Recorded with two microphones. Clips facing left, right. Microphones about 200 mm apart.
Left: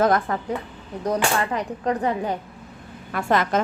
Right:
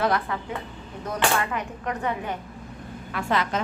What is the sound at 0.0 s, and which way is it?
Speech, 45° left (ahead or behind).